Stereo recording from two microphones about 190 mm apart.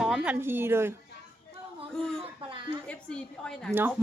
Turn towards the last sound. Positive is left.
turn(degrees=5)  # may be behind; listen again after turning